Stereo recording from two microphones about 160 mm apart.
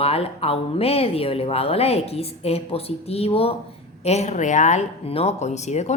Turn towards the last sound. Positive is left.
turn(degrees=45)  # may be behind; listen again after turning